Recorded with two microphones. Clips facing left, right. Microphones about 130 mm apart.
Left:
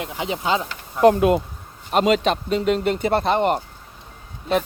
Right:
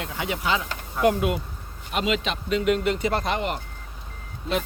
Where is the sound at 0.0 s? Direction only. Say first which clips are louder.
Left 3 dB; 25° left (ahead or behind).